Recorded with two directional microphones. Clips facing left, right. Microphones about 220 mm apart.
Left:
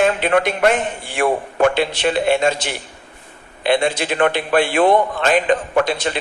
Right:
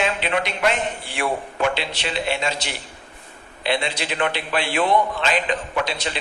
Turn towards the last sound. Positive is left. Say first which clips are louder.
# left 7 dB
turn(degrees=50)  # may be behind; listen again after turning